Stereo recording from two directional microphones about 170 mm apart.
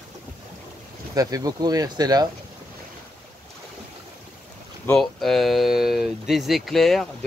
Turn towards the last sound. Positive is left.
turn(degrees=0)  # may be behind; listen again after turning